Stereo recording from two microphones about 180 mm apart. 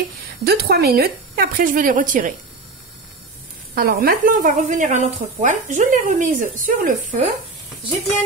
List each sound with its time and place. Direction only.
0.4 s a woman's voice: 60° right (ahead or behind)
3.7 s speech: 55° right (ahead or behind)